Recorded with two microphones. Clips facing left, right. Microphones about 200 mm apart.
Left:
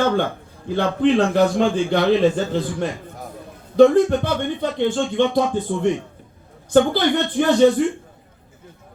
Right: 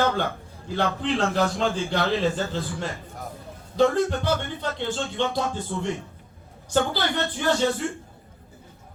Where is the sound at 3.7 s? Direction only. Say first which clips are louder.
Left 8 dB; 55° left (ahead or behind).